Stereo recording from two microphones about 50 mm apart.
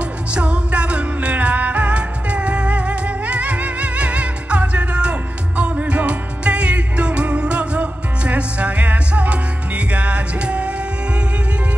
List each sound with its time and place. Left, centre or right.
0.3 s music: right